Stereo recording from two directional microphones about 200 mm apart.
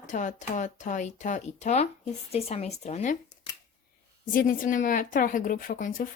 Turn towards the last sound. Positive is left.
turn(degrees=40)  # may be behind; listen again after turning